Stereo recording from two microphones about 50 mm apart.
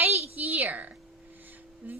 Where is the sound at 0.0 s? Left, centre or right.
Right.